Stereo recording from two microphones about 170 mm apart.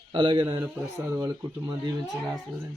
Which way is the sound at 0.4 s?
15° right (ahead or behind).